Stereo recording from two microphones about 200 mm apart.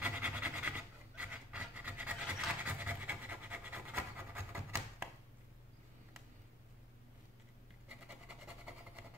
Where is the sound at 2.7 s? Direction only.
10° right (ahead or behind).